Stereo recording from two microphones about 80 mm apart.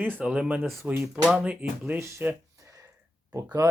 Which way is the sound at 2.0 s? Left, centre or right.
Right.